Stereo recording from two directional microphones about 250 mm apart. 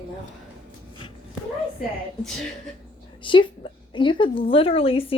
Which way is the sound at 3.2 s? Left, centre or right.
Centre.